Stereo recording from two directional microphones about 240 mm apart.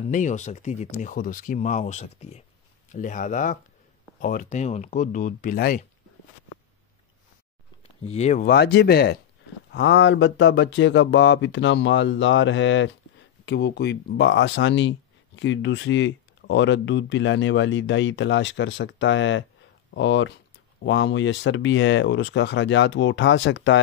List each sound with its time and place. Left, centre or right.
0.1 s speech: left
8.0 s speech: left